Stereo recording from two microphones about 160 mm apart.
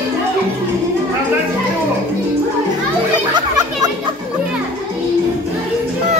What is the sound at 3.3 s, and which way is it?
Chatter, 25° right (ahead or behind).